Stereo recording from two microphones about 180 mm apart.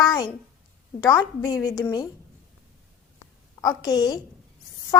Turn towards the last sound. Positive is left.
turn(degrees=20)  # may be behind; listen again after turning